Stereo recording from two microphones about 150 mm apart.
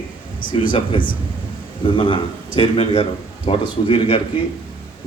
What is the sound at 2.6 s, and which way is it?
Speech, 40° left (ahead or behind).